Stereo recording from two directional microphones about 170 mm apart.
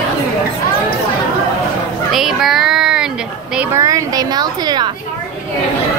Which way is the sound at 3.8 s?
20° right (ahead or behind).